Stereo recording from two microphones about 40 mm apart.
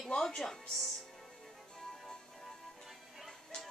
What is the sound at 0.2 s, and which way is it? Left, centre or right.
Speech, centre.